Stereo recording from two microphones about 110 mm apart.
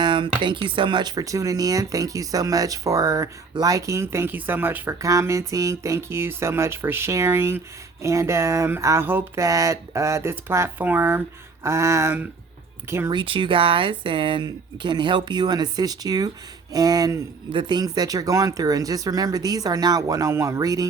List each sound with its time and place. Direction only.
0.0 s speech: 45° right (ahead or behind); by 12.3 s 20° right (ahead or behind)
13.1 s speech: 50° right (ahead or behind); by 20.8 s 35° right (ahead or behind)